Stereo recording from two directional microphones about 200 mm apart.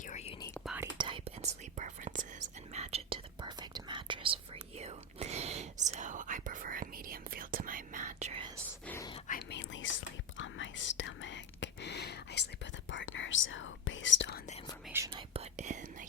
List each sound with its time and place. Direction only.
0.1 s whispering: 35° left (ahead or behind)
0.6 s whispering: 5° right (ahead or behind)
0.9 s whispering: 25° right (ahead or behind)
8.9 s whispering: 15° left (ahead or behind)
9.5 s whispering: 70° left (ahead or behind)
12.9 s whispering: 70° left (ahead or behind)
15.1 s whispering: 30° right (ahead or behind)